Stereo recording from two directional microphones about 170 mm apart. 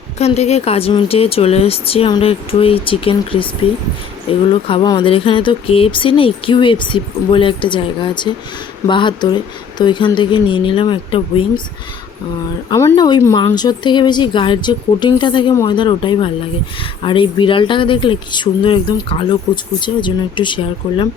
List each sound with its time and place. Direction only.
0.2 s speech: 40° left (ahead or behind)
12.7 s speech: 20° left (ahead or behind)